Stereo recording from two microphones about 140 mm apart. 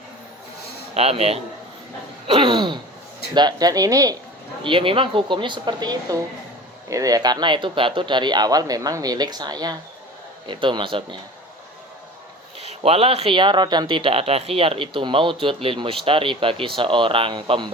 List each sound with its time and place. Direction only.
0.9 s speech: 45° right (ahead or behind); by 4.2 s 25° right (ahead or behind)
4.6 s speech: 35° right (ahead or behind)
12.5 s speech: 50° right (ahead or behind)